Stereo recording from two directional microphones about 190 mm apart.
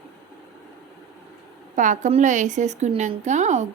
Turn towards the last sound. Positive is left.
turn(degrees=-40)  # may be behind; listen again after turning